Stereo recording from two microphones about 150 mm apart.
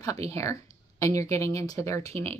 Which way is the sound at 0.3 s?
20° left (ahead or behind).